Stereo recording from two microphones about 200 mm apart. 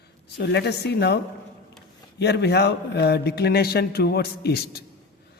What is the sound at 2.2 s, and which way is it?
A man's voice, 55° left (ahead or behind).